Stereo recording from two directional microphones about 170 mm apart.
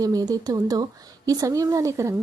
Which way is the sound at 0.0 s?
20° right (ahead or behind).